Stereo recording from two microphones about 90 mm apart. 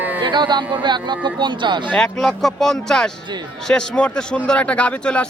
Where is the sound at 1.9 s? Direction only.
5° left (ahead or behind).